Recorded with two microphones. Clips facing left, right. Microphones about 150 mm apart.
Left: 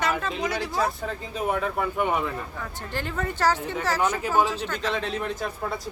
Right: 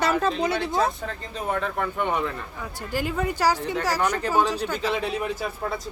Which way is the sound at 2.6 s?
10° right (ahead or behind).